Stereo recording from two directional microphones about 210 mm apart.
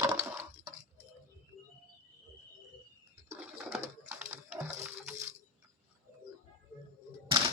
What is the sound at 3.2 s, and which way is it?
Pigeon, 5° right (ahead or behind).